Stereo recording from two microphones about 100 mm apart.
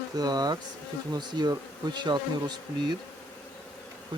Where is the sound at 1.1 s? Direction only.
45° right (ahead or behind).